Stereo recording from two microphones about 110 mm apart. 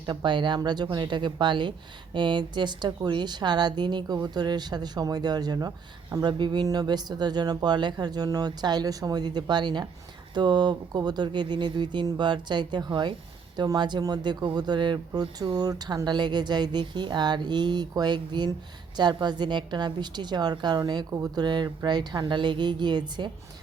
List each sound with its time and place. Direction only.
0.0 s speech: 45° right (ahead or behind)